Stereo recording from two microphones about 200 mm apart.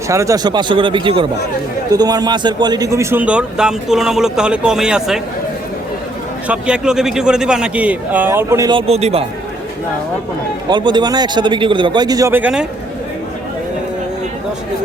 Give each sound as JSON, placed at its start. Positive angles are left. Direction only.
{"t": 0.1, "sound": "a man's voice", "side_deg": -15}
{"t": 6.5, "sound": "a man's voice", "side_deg": -5}
{"t": 8.9, "sound": "a man's voice", "side_deg": -30}
{"t": 10.7, "sound": "a man's voice", "side_deg": -20}